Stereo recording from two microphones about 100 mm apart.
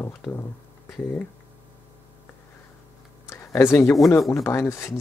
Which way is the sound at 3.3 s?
25° left (ahead or behind).